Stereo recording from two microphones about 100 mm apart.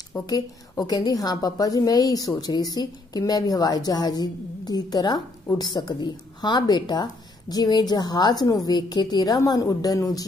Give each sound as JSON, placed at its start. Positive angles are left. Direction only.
{"t": 0.3, "sound": "a woman's voice", "side_deg": 40}